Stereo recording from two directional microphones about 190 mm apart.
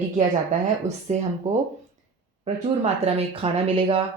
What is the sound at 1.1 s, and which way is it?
Speech, 35° right (ahead or behind).